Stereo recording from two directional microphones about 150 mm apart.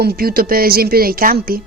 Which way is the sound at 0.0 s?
85° right.